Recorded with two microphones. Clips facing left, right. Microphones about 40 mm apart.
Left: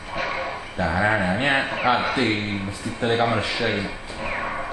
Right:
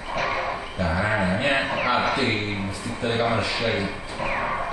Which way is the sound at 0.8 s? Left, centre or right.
Centre.